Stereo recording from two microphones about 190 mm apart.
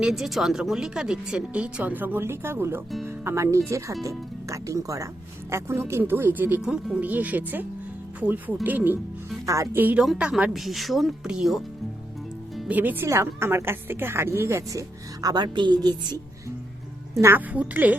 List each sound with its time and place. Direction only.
0.0 s speech: centre (ahead or behind)